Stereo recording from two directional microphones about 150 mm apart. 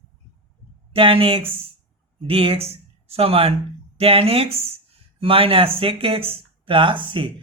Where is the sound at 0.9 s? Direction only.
35° right (ahead or behind).